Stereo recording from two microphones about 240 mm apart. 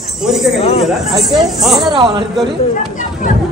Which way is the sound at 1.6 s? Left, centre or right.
Centre.